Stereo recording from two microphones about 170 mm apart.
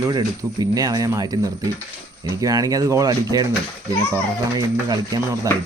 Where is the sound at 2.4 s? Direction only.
20° right (ahead or behind).